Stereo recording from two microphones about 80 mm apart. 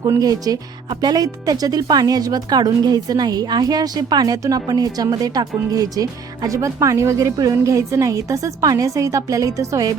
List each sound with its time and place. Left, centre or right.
0.2 s speech: right